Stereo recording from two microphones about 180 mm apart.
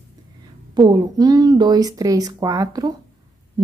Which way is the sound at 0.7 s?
20° right (ahead or behind).